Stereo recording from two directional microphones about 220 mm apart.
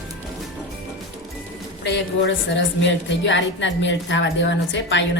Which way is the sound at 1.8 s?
55° left (ahead or behind).